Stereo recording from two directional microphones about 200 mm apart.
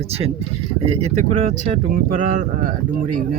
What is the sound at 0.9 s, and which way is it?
Speech, 35° right (ahead or behind).